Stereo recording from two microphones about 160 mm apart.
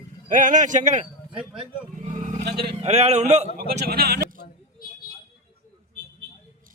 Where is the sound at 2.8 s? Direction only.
40° right (ahead or behind).